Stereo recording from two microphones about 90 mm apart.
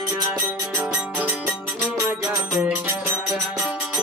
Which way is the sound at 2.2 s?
30° right (ahead or behind).